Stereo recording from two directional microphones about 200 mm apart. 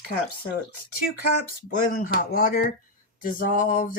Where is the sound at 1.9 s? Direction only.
45° left (ahead or behind).